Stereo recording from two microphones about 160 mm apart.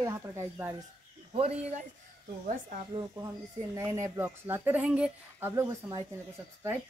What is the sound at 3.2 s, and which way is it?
Speech, 20° right (ahead or behind).